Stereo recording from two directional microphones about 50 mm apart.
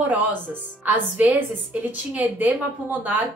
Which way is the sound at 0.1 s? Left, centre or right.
Right.